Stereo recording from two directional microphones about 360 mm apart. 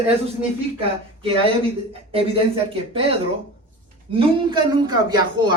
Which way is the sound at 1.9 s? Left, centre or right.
Centre.